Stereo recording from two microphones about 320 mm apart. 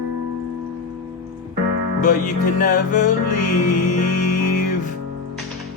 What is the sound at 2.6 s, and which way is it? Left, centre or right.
Music, left.